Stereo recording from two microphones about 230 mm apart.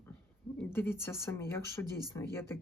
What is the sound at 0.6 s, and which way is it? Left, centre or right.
Speech, centre.